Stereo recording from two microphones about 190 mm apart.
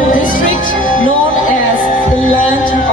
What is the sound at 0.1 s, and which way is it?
Music, 45° left (ahead or behind).